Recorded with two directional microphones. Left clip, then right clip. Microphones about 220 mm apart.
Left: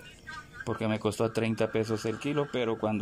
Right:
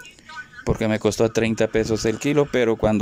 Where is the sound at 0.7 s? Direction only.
20° right (ahead or behind).